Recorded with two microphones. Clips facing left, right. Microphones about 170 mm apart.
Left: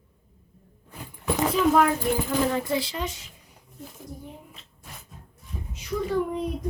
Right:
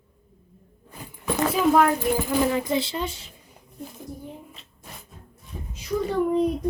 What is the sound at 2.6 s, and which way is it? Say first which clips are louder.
Speech: right 2 dB; 25° right (ahead or behind).